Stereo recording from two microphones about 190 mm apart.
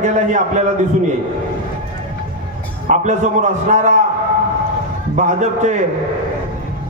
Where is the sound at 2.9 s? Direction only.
40° right (ahead or behind).